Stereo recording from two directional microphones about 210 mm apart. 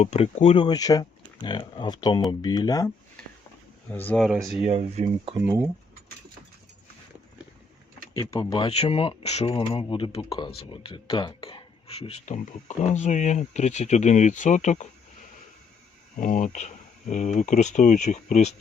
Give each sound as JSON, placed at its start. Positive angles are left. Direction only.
{"t": 0.0, "sound": "speech", "side_deg": 30}
{"t": 3.9, "sound": "speech", "side_deg": 5}
{"t": 4.3, "sound": "speech", "side_deg": -5}
{"t": 4.6, "sound": "speech", "side_deg": -30}
{"t": 5.5, "sound": "speech", "side_deg": -10}
{"t": 8.1, "sound": "speech", "side_deg": 15}
{"t": 16.1, "sound": "speech", "side_deg": 35}